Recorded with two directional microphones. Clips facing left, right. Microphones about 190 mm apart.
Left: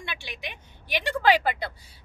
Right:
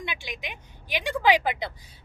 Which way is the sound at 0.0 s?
15° right (ahead or behind).